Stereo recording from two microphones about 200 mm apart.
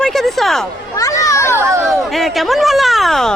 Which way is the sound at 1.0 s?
15° left (ahead or behind).